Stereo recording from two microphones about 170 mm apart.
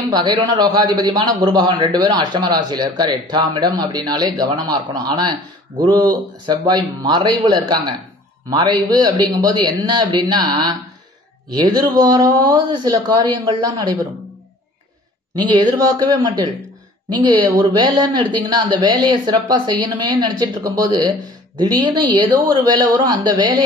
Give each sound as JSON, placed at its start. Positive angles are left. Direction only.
{"t": 0.1, "sound": "a man's voice", "side_deg": -25}
{"t": 11.5, "sound": "a man's voice", "side_deg": -25}
{"t": 15.3, "sound": "a man's voice", "side_deg": -25}